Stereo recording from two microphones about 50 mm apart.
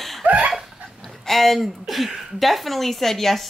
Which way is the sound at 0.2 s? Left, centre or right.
Right.